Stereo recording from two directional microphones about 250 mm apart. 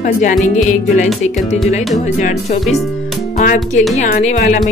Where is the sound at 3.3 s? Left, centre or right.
Left.